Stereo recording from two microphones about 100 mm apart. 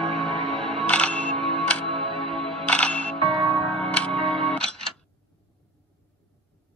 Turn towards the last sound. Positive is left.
turn(degrees=10)  # may be behind; listen again after turning